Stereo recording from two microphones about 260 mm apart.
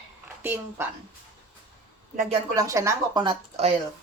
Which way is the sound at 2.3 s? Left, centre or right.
Centre.